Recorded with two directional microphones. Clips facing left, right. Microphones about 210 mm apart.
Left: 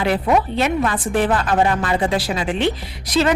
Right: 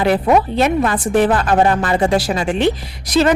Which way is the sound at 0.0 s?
45° right (ahead or behind).